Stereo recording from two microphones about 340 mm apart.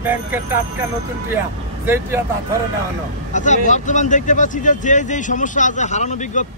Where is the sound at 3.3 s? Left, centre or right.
Left.